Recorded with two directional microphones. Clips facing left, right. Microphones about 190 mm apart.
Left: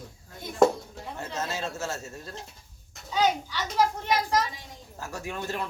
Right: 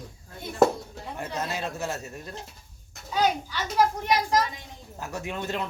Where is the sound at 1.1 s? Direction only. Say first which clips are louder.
Right 1 dB; 15° right (ahead or behind).